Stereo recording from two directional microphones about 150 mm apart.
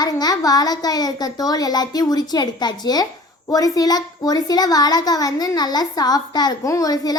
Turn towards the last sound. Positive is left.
turn(degrees=25)  # may be behind; listen again after turning